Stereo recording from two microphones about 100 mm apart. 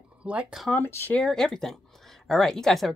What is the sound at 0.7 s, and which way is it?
Speech, 20° left (ahead or behind).